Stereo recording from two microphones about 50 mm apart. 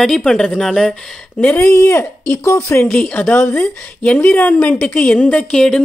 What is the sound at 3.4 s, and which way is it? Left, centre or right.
Speech, left.